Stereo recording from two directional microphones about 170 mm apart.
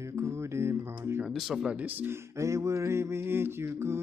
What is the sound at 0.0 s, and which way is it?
Mantra, 15° right (ahead or behind).